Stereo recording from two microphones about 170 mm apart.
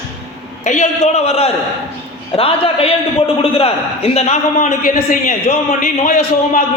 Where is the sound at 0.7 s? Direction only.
40° left (ahead or behind).